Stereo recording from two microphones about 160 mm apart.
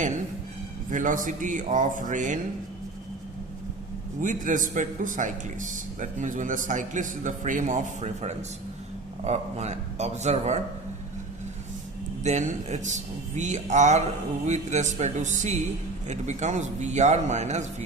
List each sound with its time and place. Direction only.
0.9 s a man's voice: 55° right (ahead or behind)
4.2 s a man's voice: 55° right (ahead or behind)
12.2 s a man's voice: 45° right (ahead or behind)